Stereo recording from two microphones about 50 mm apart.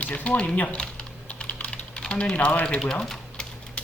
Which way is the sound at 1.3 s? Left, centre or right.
Left.